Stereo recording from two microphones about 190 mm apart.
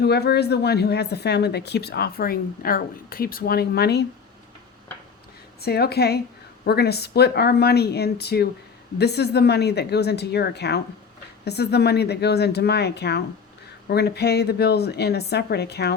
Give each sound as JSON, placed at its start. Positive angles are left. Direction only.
{"t": 0.0, "sound": "speech", "side_deg": 60}
{"t": 5.6, "sound": "speech", "side_deg": 55}